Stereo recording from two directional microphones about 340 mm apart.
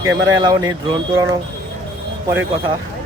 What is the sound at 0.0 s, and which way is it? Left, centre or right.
Speech, centre.